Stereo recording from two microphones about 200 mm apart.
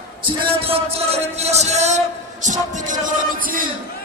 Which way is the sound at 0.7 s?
30° right (ahead or behind).